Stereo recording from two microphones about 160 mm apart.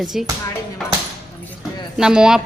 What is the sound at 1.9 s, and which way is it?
Speech, 5° right (ahead or behind).